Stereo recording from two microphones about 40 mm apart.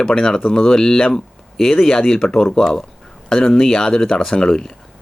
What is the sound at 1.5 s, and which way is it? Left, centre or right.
Speech, centre.